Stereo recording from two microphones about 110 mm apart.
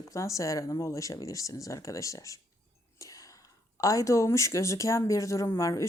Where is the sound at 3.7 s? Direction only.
30° left (ahead or behind).